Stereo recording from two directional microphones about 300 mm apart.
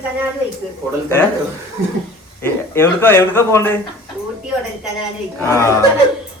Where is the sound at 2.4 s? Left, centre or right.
Centre.